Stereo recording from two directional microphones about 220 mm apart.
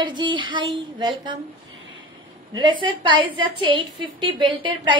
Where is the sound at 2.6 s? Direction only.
20° right (ahead or behind).